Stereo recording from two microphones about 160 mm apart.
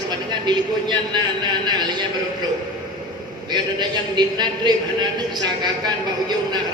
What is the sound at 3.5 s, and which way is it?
A man's voice, 25° right (ahead or behind).